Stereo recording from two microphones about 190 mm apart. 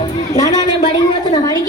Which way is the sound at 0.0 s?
20° left (ahead or behind).